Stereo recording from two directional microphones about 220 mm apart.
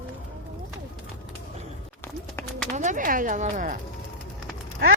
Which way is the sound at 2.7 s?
35° right (ahead or behind).